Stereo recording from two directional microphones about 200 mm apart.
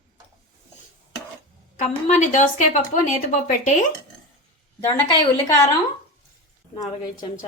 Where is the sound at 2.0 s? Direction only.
40° left (ahead or behind).